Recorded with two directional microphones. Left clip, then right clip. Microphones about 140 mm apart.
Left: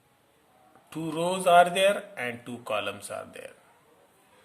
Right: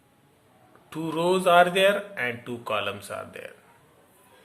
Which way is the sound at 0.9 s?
35° left (ahead or behind).